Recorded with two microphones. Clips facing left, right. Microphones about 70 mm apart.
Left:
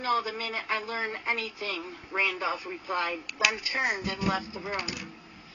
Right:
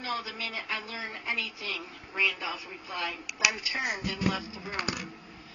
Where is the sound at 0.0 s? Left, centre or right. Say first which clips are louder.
Left 6 dB; left.